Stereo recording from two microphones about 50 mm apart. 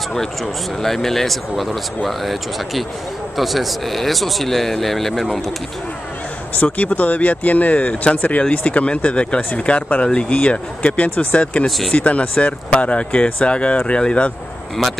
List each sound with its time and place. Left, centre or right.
0.8 s speech: centre
6.5 s speech: left